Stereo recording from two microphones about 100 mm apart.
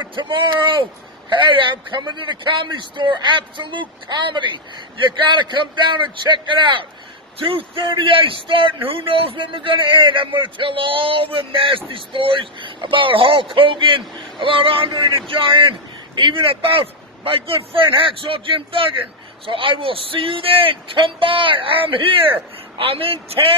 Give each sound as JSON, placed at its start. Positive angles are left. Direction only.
{"t": 0.0, "sound": "a man's voice", "side_deg": -55}